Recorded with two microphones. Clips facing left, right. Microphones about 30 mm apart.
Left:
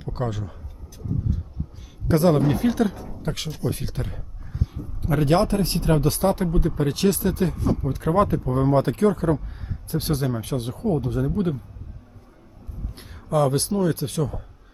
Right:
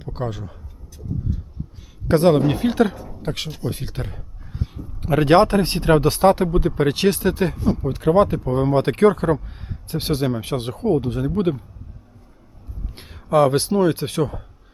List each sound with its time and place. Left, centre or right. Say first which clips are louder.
0.0 s speech: even; centre
2.0 s speech: right 3 dB; right
4.0 s a sound: right 1 dB; centre
5.0 s speech: right 6 dB; right
11.3 s speech: right 4 dB; right
13.3 s speech: right 5 dB; right